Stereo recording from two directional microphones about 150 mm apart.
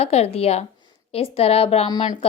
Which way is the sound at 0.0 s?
45° left (ahead or behind).